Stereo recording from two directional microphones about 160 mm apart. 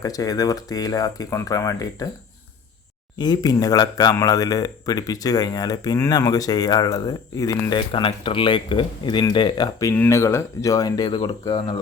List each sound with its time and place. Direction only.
0.0 s speech: 20° left (ahead or behind)
3.2 s speech: 25° left (ahead or behind)
9.9 s speech: 15° left (ahead or behind); by 11.8 s 30° left (ahead or behind)